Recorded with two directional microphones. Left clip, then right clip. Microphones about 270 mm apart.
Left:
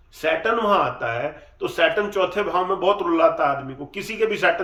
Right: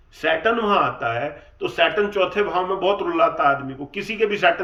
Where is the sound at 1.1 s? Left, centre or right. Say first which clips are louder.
Right 1 dB; left.